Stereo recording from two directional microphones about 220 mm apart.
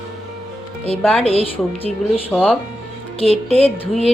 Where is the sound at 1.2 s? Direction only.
25° left (ahead or behind).